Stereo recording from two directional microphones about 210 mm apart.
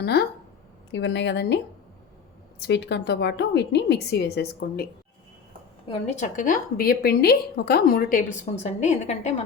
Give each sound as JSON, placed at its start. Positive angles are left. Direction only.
{"t": 0.0, "sound": "a woman's voice", "side_deg": 50}
{"t": 5.9, "sound": "a woman's voice", "side_deg": 30}